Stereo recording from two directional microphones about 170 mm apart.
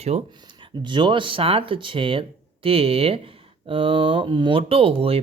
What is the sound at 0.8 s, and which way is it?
Speech, 25° right (ahead or behind).